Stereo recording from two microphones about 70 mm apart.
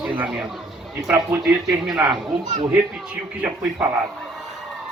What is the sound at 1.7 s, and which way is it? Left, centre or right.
Speech, centre.